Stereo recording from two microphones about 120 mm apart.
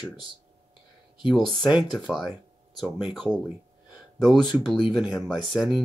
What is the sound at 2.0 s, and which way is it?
Speech, 5° right (ahead or behind).